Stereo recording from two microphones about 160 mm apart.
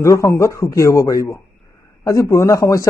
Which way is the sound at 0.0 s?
20° left (ahead or behind).